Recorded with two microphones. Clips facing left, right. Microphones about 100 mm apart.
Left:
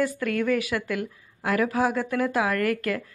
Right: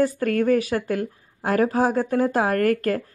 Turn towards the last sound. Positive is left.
turn(degrees=-40)  # may be behind; listen again after turning